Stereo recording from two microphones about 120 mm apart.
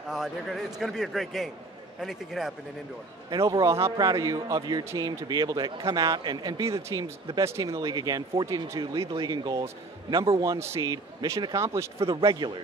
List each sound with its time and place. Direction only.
0.1 s a man's voice: 5° right (ahead or behind)
3.3 s a man's voice: 30° right (ahead or behind)
6.6 s a man's voice: 25° right (ahead or behind); by 10.4 s 40° right (ahead or behind)
10.4 s a man's voice: 25° right (ahead or behind)
11.5 s speech: 25° right (ahead or behind)
12.2 s a man's voice: 40° right (ahead or behind)